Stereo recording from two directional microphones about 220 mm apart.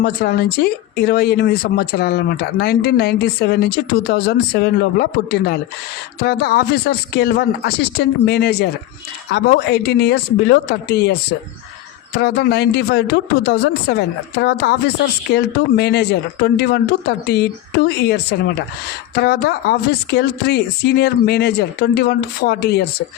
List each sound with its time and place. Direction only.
0.0 s speech: 45° left (ahead or behind)